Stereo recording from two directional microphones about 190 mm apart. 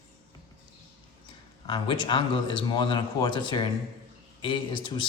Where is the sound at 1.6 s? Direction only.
25° left (ahead or behind).